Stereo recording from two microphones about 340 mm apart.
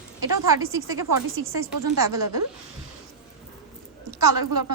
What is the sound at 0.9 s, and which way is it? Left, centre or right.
Speech, right.